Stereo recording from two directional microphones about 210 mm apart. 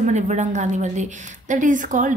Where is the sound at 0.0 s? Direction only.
35° right (ahead or behind).